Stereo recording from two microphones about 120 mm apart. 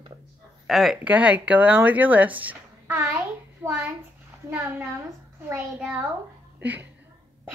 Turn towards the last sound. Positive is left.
turn(degrees=-15)  # may be behind; listen again after turning